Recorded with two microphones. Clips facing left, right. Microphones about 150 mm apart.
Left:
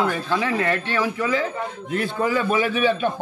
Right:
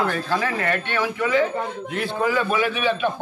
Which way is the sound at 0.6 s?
30° left (ahead or behind).